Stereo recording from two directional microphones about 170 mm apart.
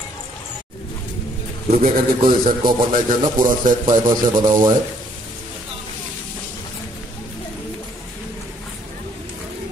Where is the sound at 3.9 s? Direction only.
25° right (ahead or behind).